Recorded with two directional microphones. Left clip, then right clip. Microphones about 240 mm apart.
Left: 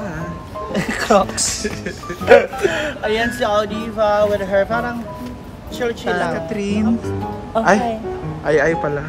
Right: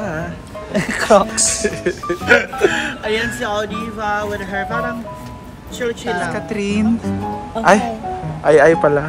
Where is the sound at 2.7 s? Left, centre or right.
Left.